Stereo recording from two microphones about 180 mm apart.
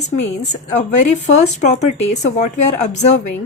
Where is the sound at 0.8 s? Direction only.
40° left (ahead or behind).